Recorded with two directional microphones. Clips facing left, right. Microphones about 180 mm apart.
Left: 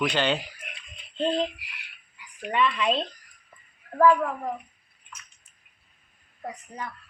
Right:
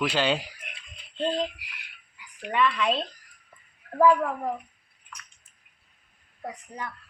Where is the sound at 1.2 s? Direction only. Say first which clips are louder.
Left 2 dB; 20° left (ahead or behind).